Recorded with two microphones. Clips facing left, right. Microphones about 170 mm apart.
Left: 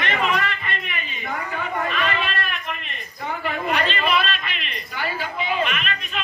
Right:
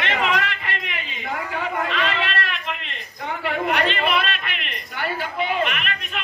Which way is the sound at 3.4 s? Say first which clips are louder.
Right 2 dB; 70° right (ahead or behind).